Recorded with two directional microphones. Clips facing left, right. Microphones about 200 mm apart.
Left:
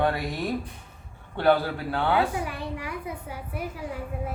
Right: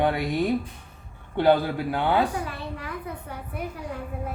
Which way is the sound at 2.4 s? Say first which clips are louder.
Left 1 dB; 15° left (ahead or behind).